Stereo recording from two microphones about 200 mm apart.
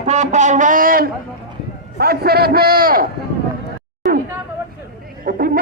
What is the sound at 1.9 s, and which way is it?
A man's voice, 50° right (ahead or behind).